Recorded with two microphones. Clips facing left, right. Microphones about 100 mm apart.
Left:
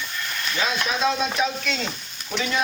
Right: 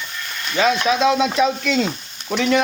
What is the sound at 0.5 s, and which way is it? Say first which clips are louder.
Speech: right 9 dB; 85° right.